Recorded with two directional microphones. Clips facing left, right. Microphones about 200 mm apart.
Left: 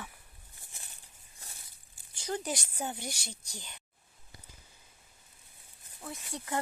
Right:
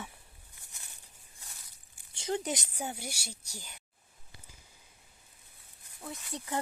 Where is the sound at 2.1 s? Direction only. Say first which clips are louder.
Right 2 dB; 25° right (ahead or behind); by 3.8 s 10° right (ahead or behind).